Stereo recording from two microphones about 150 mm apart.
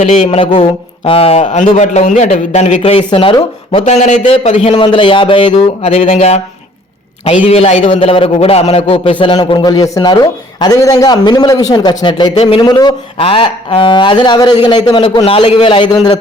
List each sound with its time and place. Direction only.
0.0 s a man's voice: 50° left (ahead or behind)
1.0 s a man's voice: 40° left (ahead or behind)
3.0 s a man's voice: 35° left (ahead or behind)
3.8 s a man's voice: 50° left (ahead or behind)
7.4 s a man's voice: 40° left (ahead or behind)
15.2 s a man's voice: 40° left (ahead or behind)